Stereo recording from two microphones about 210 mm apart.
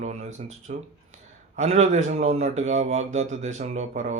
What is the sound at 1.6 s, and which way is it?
Speech, 35° right (ahead or behind).